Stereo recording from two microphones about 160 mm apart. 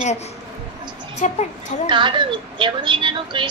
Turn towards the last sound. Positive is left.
turn(degrees=-30)  # may be behind; listen again after turning